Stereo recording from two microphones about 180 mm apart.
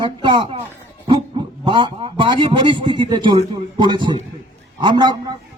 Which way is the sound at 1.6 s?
25° right (ahead or behind).